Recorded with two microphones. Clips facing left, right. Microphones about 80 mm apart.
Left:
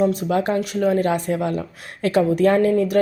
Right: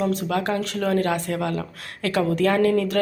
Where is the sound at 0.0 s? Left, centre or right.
Centre.